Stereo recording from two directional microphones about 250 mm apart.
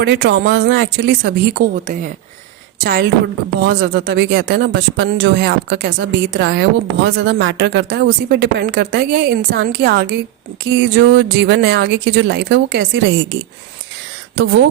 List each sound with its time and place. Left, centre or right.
0.0 s a woman's voice: right